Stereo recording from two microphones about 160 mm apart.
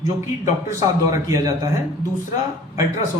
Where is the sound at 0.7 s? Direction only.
20° right (ahead or behind).